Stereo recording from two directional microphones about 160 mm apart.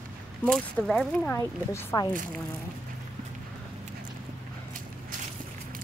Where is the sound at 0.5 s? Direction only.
Centre (ahead or behind).